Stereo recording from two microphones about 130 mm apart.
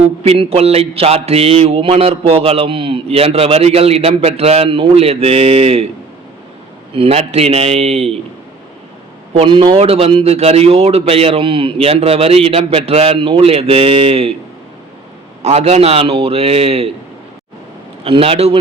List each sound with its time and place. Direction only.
0.2 s a man's voice: 55° right (ahead or behind)
6.9 s a man's voice: 50° right (ahead or behind)
9.5 s a man's voice: 40° right (ahead or behind)
15.4 s a man's voice: 55° right (ahead or behind)
18.0 s a man's voice: 45° right (ahead or behind)